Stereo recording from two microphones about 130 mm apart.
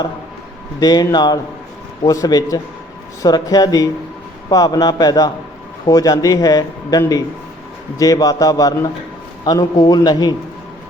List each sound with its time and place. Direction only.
0.8 s a man's voice: 30° left (ahead or behind)